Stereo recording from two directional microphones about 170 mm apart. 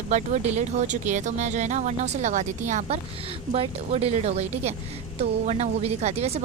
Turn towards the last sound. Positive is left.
turn(degrees=-40)  # may be behind; listen again after turning